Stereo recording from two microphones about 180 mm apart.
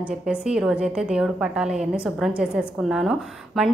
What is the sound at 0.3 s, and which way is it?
A woman's voice, 5° right (ahead or behind).